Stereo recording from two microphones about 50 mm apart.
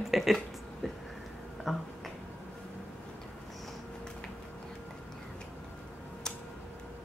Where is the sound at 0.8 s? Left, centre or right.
Centre.